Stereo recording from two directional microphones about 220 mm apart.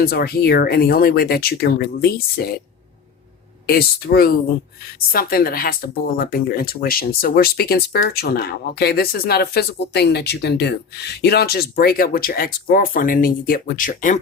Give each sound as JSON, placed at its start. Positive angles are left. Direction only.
{"t": 0.0, "sound": "speech", "side_deg": 45}
{"t": 3.7, "sound": "speech", "side_deg": 45}